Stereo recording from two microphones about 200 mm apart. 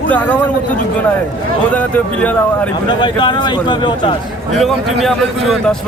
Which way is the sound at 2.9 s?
25° left (ahead or behind).